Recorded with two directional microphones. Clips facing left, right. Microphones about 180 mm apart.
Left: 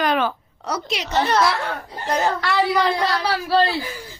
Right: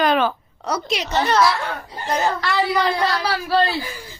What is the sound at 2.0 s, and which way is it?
Speech, 65° left (ahead or behind).